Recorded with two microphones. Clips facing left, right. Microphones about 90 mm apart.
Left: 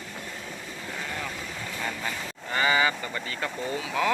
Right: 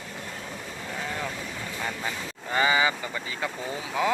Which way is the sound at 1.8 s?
10° right (ahead or behind).